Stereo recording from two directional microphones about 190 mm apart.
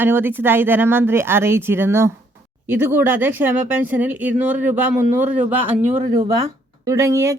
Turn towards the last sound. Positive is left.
turn(degrees=-15)  # may be behind; listen again after turning